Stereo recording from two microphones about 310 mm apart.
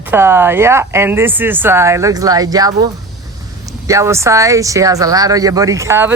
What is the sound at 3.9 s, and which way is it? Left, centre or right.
Speech, centre.